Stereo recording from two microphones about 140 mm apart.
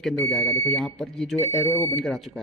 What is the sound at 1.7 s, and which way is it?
Speech, 15° left (ahead or behind).